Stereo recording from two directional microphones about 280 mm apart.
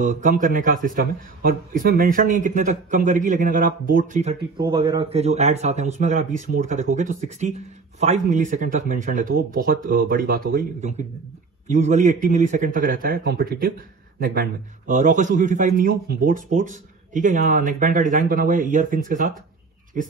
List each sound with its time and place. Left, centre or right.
0.0 s a man's voice: right
4.6 s a man's voice: centre